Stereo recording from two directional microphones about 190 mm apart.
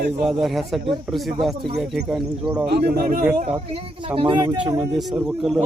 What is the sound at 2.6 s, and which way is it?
Speech, 60° right (ahead or behind).